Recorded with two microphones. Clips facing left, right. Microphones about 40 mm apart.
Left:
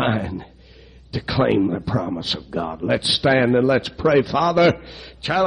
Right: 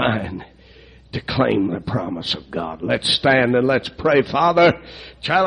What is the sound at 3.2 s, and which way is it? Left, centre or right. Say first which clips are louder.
A man's voice: right 1 dB; centre.